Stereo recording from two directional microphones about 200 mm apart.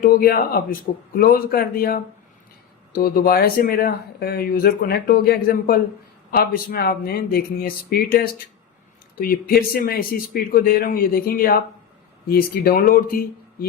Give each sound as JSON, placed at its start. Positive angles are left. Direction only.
{"t": 0.0, "sound": "speech", "side_deg": 50}